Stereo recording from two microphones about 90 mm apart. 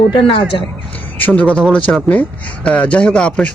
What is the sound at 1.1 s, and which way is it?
Speech, 15° left (ahead or behind).